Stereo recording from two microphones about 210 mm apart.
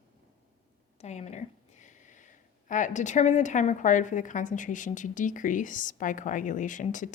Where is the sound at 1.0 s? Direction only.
30° left (ahead or behind).